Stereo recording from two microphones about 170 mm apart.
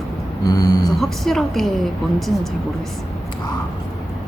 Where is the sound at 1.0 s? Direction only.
Centre (ahead or behind).